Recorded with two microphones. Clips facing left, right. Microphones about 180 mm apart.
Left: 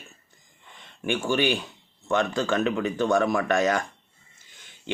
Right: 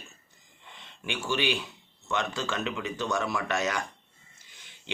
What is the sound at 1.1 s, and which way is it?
Speech, 50° left (ahead or behind).